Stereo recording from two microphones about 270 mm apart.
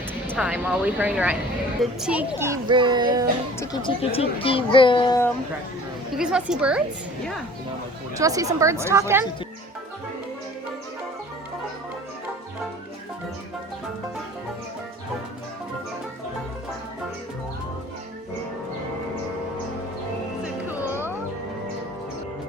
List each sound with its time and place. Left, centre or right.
0.3 s speech: centre
3.6 s a child's voice: centre
6.1 s speech: centre
8.1 s speech: centre
20.4 s music: centre